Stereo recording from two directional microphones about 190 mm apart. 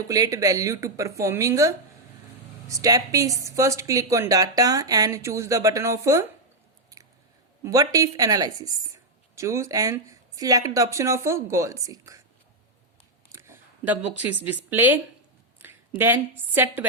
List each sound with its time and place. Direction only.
0.1 s speech: 20° right (ahead or behind)
7.6 s a woman's voice: 20° right (ahead or behind)
13.3 s speech: 10° right (ahead or behind)
15.6 s a sound: 10° right (ahead or behind)
16.0 s speech: 10° right (ahead or behind)